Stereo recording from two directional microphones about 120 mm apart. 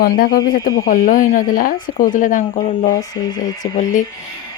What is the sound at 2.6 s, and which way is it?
Speech, 65° left (ahead or behind).